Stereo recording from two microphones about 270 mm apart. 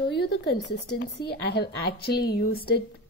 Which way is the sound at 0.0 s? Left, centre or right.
Left.